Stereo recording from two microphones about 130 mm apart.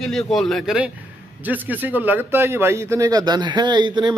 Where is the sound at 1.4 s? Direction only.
15° right (ahead or behind).